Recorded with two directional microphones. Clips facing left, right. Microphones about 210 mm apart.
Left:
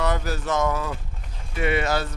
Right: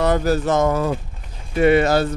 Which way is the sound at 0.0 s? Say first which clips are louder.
Right 8 dB; 35° right (ahead or behind).